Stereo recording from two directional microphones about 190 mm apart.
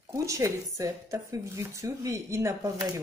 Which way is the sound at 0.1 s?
15° right (ahead or behind).